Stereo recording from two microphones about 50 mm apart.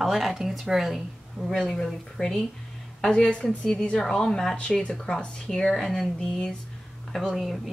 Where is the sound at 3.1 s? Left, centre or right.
Left.